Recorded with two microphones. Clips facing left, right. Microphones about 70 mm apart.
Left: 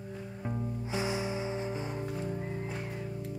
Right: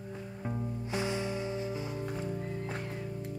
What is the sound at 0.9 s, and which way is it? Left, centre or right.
Music, centre.